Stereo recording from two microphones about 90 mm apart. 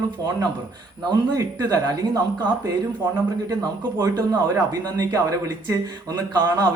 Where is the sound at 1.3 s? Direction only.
45° right (ahead or behind).